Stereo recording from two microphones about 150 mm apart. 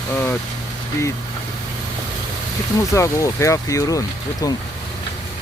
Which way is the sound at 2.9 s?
20° left (ahead or behind).